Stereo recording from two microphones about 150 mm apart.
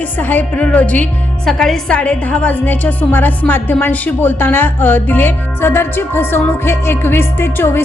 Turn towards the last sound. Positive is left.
turn(degrees=15)  # may be behind; listen again after turning